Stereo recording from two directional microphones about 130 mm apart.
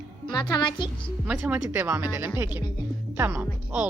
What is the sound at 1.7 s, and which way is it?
A woman's voice, 15° right (ahead or behind).